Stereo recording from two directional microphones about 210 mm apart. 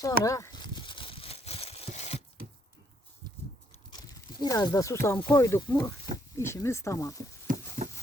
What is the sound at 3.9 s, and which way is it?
Speech, 20° left (ahead or behind).